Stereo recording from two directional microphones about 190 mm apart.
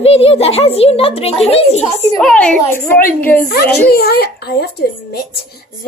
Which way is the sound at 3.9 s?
55° left (ahead or behind).